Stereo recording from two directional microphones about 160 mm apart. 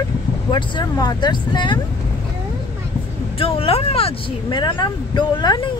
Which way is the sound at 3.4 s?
35° left (ahead or behind).